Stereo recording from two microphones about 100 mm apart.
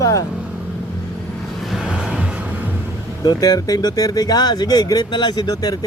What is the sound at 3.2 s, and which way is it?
Speech, 40° left (ahead or behind).